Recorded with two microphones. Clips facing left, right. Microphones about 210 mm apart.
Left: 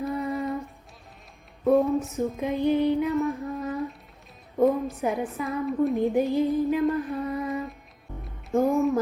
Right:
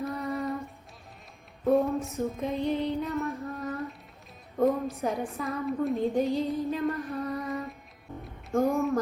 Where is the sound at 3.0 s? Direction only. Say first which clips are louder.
Left 6 dB; centre (ahead or behind).